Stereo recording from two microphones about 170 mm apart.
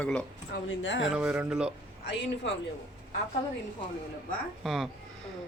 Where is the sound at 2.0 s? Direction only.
90° left.